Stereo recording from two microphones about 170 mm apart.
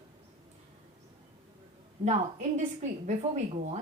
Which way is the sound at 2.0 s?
40° right (ahead or behind).